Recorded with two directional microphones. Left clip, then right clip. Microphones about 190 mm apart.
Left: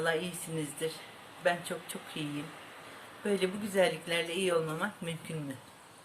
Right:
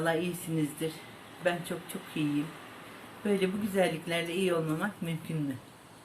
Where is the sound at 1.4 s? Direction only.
20° left (ahead or behind).